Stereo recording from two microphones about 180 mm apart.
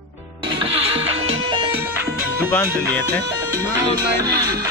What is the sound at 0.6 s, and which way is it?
Music, 30° right (ahead or behind).